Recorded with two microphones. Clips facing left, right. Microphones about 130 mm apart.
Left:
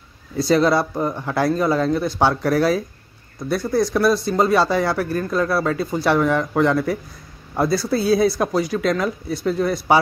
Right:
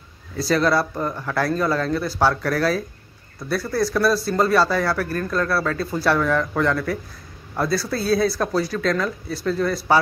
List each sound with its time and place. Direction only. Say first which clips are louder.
0.5 s speech: left 3 dB; 20° left (ahead or behind)